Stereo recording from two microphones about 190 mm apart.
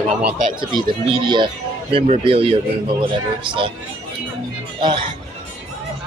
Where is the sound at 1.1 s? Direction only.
25° right (ahead or behind).